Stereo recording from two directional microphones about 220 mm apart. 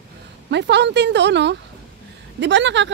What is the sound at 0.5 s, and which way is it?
A woman's voice, 50° right (ahead or behind).